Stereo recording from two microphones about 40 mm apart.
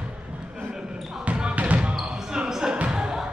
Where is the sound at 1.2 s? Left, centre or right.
Right.